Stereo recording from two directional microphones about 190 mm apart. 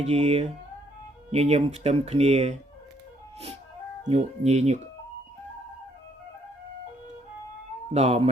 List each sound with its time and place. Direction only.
0.0 s speech: 35° right (ahead or behind)
4.1 s speech: 35° right (ahead or behind)
7.9 s speech: 35° right (ahead or behind)